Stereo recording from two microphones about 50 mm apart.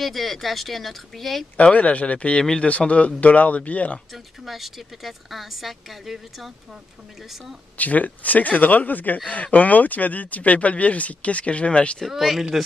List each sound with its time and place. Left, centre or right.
0.0 s speech: centre
1.6 s speech: left
4.1 s speech: centre
7.7 s speech: left
12.1 s speech: centre